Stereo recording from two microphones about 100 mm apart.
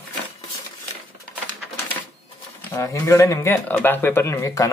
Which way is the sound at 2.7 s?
30° left (ahead or behind).